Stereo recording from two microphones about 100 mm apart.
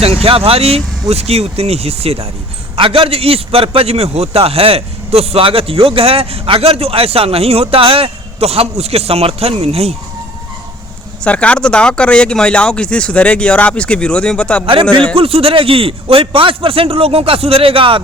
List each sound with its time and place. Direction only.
0.2 s speech: 75° right (ahead or behind); by 2.2 s 90° right
2.7 s a man's voice: 60° right (ahead or behind); by 9.9 s 90° right
11.2 s speech: 10° left (ahead or behind)
15.1 s a man's voice: 70° right (ahead or behind)